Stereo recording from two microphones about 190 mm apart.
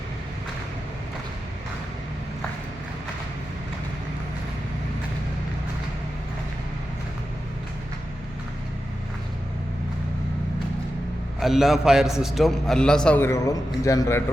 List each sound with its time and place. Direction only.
11.3 s a man's voice: centre (ahead or behind); by 14.2 s 15° left (ahead or behind)